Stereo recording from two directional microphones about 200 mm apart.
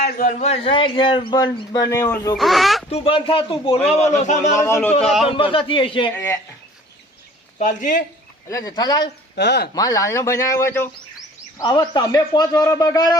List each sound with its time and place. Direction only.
0.0 s a man's voice: 40° left (ahead or behind); by 2.3 s 15° left (ahead or behind)
2.4 s speech: centre (ahead or behind)
2.9 s a man's voice: 25° left (ahead or behind)
3.8 s a man's voice: 10° left (ahead or behind)
4.2 s a man's voice: 35° left (ahead or behind)
4.6 s a man's voice: 15° left (ahead or behind)
5.0 s speech: centre (ahead or behind)
5.3 s a man's voice: 25° left (ahead or behind)
7.6 s a man's voice: 40° left (ahead or behind)
8.4 s a man's voice: 15° left (ahead or behind)
9.3 s speech: 55° left (ahead or behind)
9.7 s a man's voice: 15° left (ahead or behind)